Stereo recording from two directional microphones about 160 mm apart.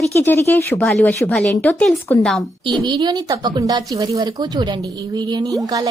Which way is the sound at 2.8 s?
25° right (ahead or behind).